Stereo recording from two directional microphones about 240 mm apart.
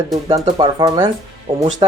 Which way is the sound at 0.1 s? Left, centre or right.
Centre.